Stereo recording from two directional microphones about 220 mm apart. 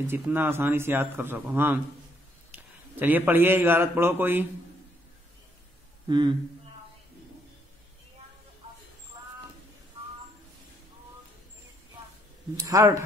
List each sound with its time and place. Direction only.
0.0 s a man's voice: 10° right (ahead or behind)
6.0 s speech: 20° right (ahead or behind)
12.6 s speech: 15° right (ahead or behind)